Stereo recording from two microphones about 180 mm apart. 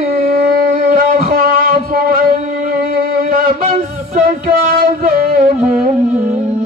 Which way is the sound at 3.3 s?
50° right (ahead or behind).